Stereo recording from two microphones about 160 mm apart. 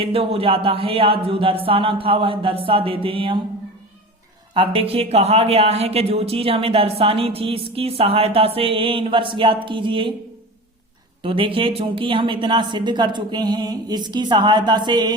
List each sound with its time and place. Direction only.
0.0 s speech: 35° right (ahead or behind)
4.5 s speech: 35° right (ahead or behind)
11.2 s speech: 30° right (ahead or behind)